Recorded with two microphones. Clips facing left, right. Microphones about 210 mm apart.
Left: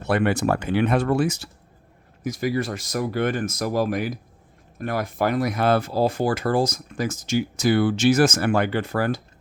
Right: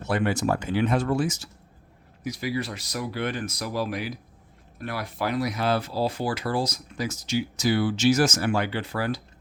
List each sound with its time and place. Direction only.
0.0 s speech: 65° left (ahead or behind)
2.2 s speech: 50° left (ahead or behind)